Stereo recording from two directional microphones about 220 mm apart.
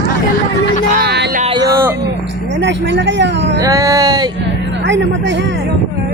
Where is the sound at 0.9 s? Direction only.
45° right (ahead or behind).